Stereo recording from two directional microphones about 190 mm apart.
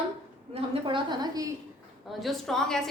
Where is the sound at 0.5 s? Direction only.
25° right (ahead or behind).